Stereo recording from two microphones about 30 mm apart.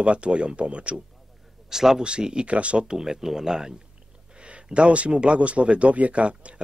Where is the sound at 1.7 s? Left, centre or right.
Centre.